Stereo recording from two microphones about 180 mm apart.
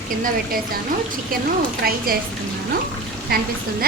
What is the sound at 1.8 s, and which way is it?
Speech, 55° right (ahead or behind).